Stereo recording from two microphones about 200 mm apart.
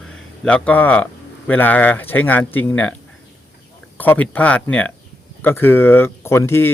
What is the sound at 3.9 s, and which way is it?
Speech, 10° left (ahead or behind).